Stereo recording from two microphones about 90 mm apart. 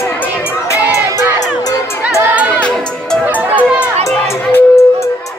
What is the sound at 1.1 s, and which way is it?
Crowd, 45° left (ahead or behind).